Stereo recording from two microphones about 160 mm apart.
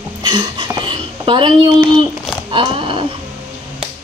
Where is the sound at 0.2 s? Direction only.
30° right (ahead or behind).